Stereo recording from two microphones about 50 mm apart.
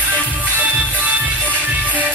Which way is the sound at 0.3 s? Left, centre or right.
Right.